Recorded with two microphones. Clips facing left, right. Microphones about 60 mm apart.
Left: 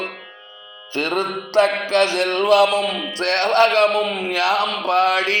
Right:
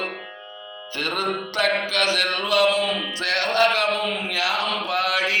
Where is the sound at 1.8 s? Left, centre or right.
Left.